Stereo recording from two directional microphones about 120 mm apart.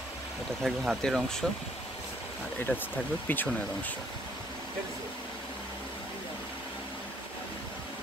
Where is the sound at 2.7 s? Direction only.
15° left (ahead or behind).